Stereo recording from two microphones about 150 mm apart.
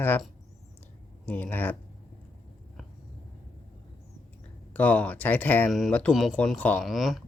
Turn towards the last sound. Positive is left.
turn(degrees=0)  # may be behind; listen again after turning